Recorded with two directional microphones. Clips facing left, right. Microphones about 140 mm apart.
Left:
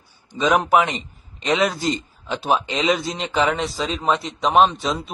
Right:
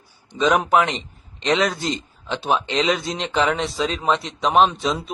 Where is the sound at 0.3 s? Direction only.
Centre (ahead or behind).